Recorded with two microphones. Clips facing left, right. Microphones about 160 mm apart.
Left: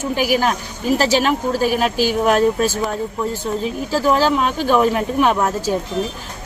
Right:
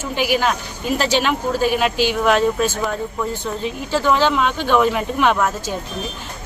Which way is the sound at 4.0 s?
40° left (ahead or behind).